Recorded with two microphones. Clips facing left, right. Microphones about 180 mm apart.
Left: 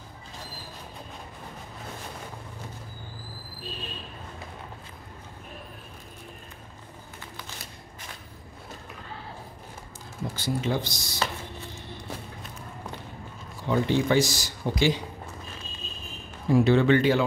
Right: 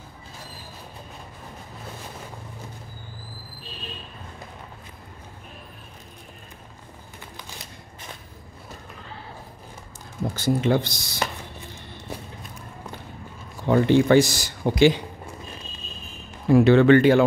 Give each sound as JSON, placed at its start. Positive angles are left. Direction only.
{"t": 10.3, "sound": "speech", "side_deg": -55}
{"t": 13.7, "sound": "speech", "side_deg": -60}
{"t": 16.4, "sound": "speech", "side_deg": -70}